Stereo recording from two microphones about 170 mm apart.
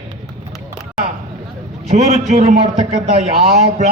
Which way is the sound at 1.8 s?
40° right (ahead or behind).